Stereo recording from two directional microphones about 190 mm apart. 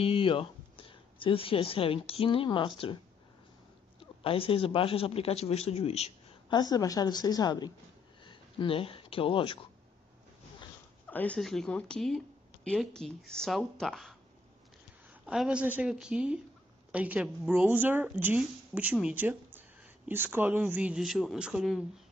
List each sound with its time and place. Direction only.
0.0 s speech: 30° left (ahead or behind)
4.0 s speech: 30° left (ahead or behind)
6.6 s a woman's voice: 20° left (ahead or behind)
11.1 s speech: 10° left (ahead or behind)
15.2 s speech: 5° right (ahead or behind)